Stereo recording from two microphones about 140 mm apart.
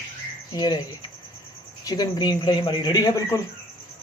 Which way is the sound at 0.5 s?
30° left (ahead or behind).